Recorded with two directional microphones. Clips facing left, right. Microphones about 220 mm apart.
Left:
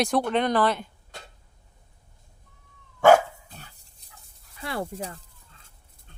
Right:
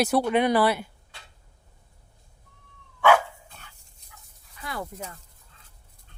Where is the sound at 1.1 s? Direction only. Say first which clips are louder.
Left 9 dB; 45° left (ahead or behind).